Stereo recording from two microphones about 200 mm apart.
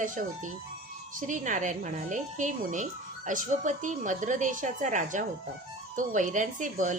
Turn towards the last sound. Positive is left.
turn(degrees=-40)  # may be behind; listen again after turning